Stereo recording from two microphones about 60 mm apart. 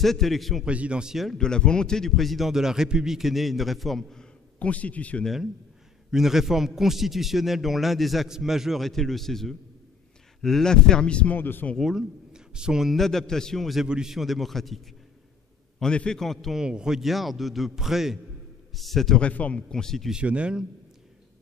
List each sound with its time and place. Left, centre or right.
0.0 s a man's voice: centre
0.7 s speech: centre
1.4 s a man's voice: centre
4.2 s a man's voice: left
5.2 s a man's voice: centre
11.3 s speech: left
11.8 s a man's voice: centre
12.9 s a man's voice: centre
13.8 s a man's voice: centre
15.8 s speech: centre
16.5 s a man's voice: centre
19.1 s speech: left
19.7 s speech: centre
20.1 s a man's voice: centre